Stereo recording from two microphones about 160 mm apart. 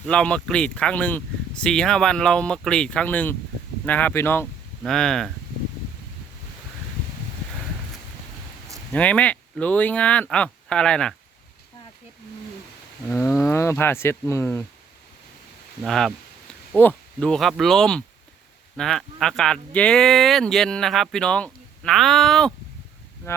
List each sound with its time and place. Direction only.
0.0 s speech: 5° left (ahead or behind)
4.8 s speech: 5° left (ahead or behind)
8.9 s speech: 10° left (ahead or behind)
13.2 s speech: 5° right (ahead or behind)
13.5 s speech: 15° left (ahead or behind)
15.8 s speech: centre (ahead or behind)